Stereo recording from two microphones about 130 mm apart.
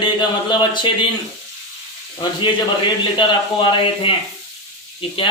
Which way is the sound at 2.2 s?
35° left (ahead or behind).